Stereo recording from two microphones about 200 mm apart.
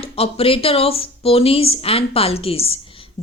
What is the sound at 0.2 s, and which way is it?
A woman's voice, 30° left (ahead or behind).